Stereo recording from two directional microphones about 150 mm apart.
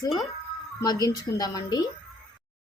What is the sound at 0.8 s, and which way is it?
A woman's voice, 25° left (ahead or behind).